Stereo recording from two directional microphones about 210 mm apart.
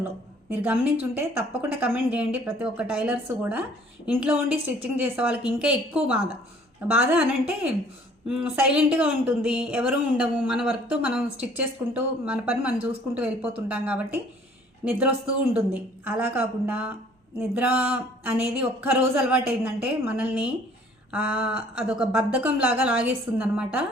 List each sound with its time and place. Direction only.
0.5 s a woman's voice: 10° right (ahead or behind)